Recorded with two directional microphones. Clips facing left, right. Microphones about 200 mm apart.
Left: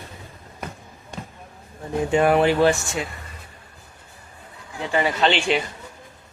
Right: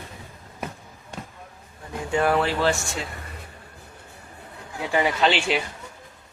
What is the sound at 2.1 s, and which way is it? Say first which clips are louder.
Speech: left 4 dB; 20° left (ahead or behind).